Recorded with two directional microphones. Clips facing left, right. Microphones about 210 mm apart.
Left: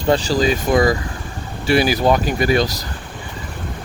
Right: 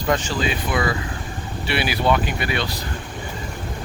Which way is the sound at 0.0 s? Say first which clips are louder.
Left 6 dB; 35° left (ahead or behind).